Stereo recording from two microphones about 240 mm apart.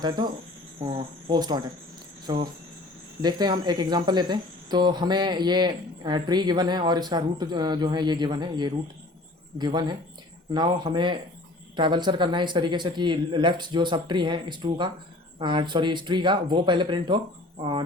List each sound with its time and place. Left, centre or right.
0.8 s speech: right